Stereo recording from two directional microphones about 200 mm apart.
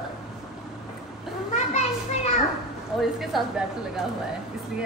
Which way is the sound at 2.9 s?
Centre (ahead or behind).